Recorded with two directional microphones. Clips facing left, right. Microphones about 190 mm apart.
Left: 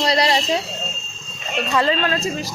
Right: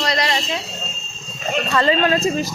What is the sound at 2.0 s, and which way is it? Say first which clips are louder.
Speech: right 5 dB; 20° right (ahead or behind).